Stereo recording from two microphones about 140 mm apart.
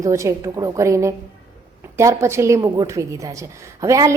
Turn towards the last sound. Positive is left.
turn(degrees=-25)  # may be behind; listen again after turning